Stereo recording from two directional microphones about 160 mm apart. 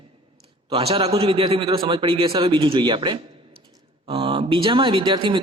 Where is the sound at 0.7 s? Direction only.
35° right (ahead or behind).